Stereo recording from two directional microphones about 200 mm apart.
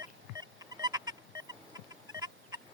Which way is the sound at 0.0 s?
20° right (ahead or behind).